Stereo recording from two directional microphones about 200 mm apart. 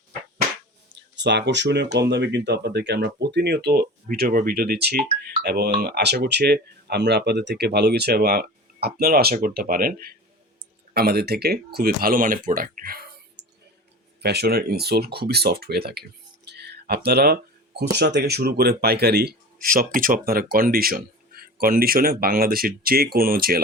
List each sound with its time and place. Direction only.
0.9 s speech: 60° right (ahead or behind)
16.6 s a sound: 55° right (ahead or behind)
17.7 s speech: 55° right (ahead or behind)